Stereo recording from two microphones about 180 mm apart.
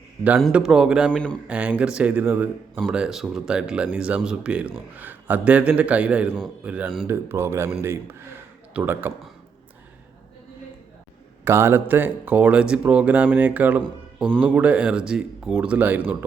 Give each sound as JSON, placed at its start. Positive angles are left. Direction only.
{"t": 0.3, "sound": "speech", "side_deg": 0}
{"t": 7.1, "sound": "speech", "side_deg": -15}
{"t": 11.4, "sound": "speech", "side_deg": -15}